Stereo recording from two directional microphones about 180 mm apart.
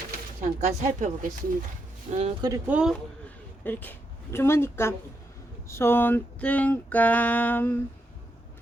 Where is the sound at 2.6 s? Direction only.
5° right (ahead or behind).